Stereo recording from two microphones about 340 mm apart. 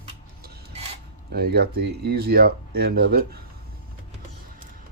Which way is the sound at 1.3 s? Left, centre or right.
Right.